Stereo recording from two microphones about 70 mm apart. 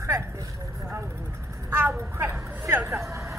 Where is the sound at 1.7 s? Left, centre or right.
Right.